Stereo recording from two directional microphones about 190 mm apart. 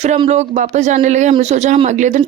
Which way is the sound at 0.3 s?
40° right (ahead or behind).